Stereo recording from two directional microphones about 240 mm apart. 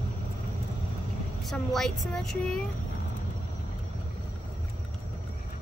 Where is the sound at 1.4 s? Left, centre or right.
Centre.